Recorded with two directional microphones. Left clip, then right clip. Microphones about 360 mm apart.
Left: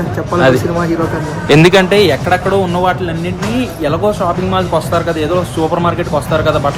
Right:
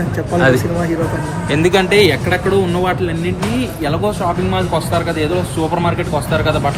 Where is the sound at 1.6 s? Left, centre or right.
Centre.